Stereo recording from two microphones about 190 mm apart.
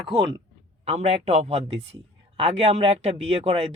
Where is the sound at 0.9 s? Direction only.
35° right (ahead or behind).